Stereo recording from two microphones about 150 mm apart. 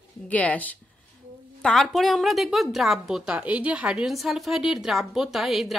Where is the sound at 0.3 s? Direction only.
10° left (ahead or behind).